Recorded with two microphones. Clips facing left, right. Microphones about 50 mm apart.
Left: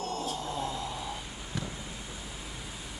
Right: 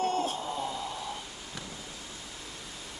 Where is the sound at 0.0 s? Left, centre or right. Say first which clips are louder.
Right 5 dB; right.